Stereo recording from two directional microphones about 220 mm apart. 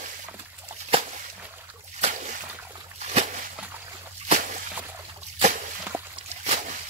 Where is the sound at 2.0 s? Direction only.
35° right (ahead or behind).